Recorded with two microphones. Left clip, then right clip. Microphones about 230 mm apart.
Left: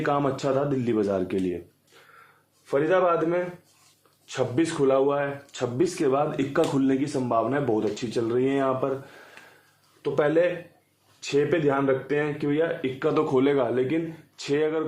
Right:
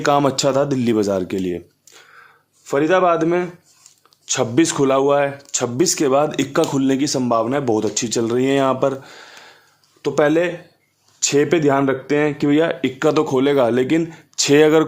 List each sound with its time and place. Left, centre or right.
0.0 s speech: right
2.6 s speech: right
10.0 s speech: right
13.2 s speech: right